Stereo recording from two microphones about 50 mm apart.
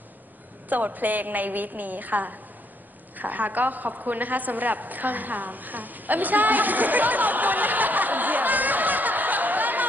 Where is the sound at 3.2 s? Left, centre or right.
Right.